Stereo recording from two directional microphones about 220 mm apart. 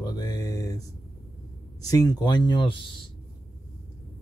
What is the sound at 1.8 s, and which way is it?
Speech, 15° left (ahead or behind).